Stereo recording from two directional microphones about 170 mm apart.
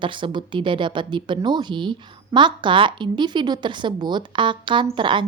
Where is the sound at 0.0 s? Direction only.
30° right (ahead or behind).